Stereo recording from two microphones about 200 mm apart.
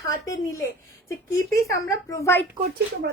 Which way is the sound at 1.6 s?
15° left (ahead or behind).